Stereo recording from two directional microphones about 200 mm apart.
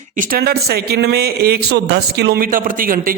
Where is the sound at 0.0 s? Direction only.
40° right (ahead or behind).